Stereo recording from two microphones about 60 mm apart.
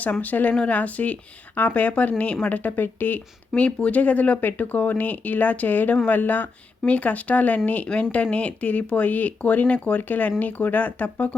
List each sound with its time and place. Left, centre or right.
0.0 s speech: left